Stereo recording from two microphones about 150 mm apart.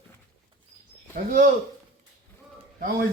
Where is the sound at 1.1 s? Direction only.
65° right (ahead or behind).